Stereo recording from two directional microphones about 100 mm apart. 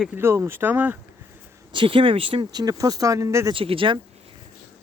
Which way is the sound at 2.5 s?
40° right (ahead or behind).